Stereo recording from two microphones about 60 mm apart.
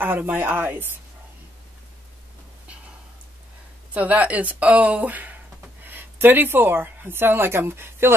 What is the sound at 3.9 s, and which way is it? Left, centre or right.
Speech, right.